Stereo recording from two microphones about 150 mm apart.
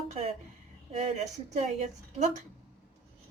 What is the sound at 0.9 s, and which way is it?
Speech, 45° right (ahead or behind).